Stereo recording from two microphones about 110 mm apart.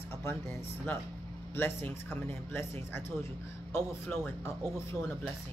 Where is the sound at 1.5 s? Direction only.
20° left (ahead or behind).